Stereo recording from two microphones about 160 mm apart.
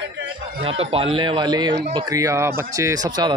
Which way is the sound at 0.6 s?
35° right (ahead or behind).